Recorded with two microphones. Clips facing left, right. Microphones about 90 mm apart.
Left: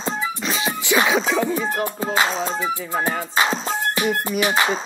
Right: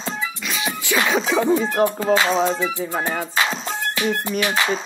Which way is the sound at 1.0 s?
Centre (ahead or behind).